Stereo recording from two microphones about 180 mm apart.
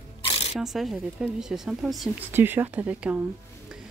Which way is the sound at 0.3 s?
30° left (ahead or behind).